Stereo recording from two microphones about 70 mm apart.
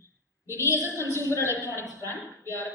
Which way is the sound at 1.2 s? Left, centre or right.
Left.